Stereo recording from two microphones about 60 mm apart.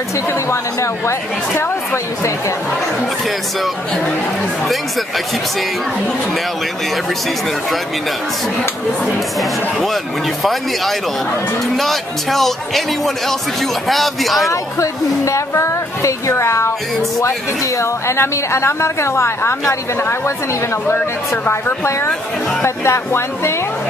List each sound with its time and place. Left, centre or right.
0.3 s speech: left
9.0 s speech: centre
14.5 s a woman's voice: left